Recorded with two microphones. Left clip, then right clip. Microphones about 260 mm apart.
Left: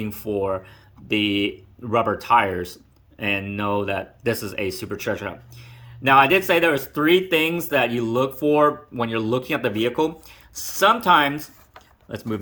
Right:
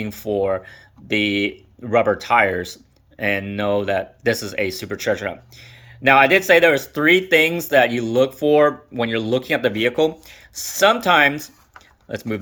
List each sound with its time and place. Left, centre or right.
0.4 s speech: centre
10.5 s speech: right
10.8 s speech: centre